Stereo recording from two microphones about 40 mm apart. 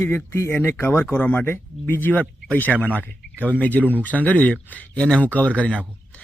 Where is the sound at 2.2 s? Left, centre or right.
Left.